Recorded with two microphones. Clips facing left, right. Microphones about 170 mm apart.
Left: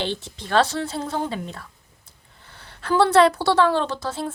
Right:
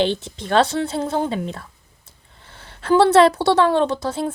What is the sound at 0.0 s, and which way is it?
A woman's voice, 20° right (ahead or behind).